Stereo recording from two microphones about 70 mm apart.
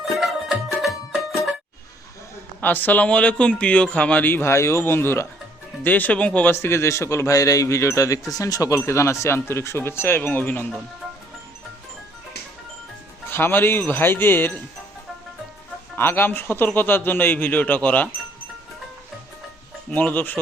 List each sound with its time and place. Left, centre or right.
0.2 s music: centre
2.6 s a man's voice: left
4.5 s speech: left
5.8 s a man's voice: left
6.5 s speech: left
8.3 s speech: left
8.8 s speech: left
13.3 s speech: left
16.0 s a man's voice: left
19.9 s a man's voice: left